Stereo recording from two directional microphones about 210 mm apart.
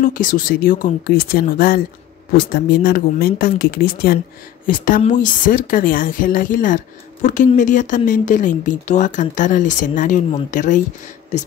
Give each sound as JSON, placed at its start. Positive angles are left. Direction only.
{"t": 0.0, "sound": "speech", "side_deg": 40}